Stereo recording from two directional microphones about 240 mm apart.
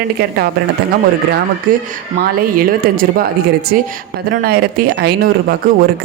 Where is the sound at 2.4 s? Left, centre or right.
Right.